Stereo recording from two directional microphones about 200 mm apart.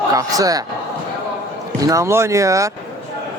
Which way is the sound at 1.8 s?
15° right (ahead or behind).